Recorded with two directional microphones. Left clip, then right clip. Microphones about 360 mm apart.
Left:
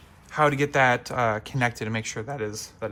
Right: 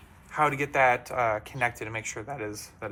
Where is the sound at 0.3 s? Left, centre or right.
Left.